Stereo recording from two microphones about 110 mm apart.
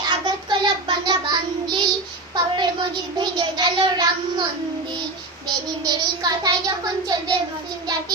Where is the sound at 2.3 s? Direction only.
45° right (ahead or behind).